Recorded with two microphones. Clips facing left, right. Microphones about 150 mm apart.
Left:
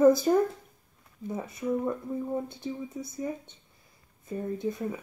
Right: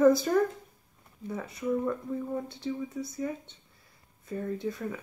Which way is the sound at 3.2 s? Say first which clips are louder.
Left 3 dB; 25° left (ahead or behind).